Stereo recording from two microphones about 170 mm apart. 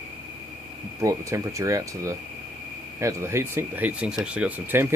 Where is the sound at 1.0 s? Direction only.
20° right (ahead or behind).